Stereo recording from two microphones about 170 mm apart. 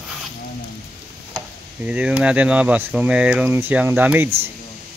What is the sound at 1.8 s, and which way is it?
Speech, 5° right (ahead or behind).